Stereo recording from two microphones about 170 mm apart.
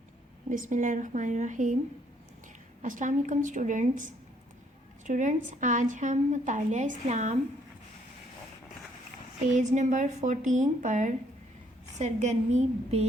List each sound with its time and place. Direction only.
0.5 s a woman's voice: 50° right (ahead or behind)
2.8 s a woman's voice: 50° right (ahead or behind)
9.5 s a woman's voice: 45° right (ahead or behind)